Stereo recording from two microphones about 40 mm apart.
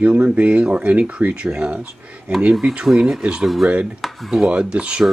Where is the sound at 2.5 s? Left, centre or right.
Centre.